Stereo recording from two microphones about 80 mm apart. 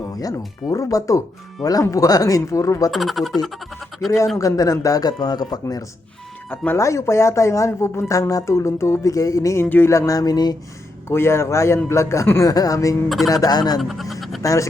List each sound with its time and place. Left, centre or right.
0.1 s music: left
0.7 s speech: left
2.9 s speech: centre
4.4 s speech: left
6.7 s speech: left
9.6 s speech: left
10.1 s speech: left
11.1 s speech: left
12.5 s speech: left
13.1 s speech: centre
13.3 s speech: left
13.7 s speech: centre
14.4 s speech: left